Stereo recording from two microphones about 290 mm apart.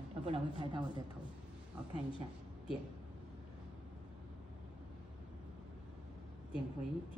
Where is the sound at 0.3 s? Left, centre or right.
Centre.